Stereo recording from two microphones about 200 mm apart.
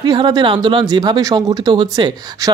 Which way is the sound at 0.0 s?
20° right (ahead or behind).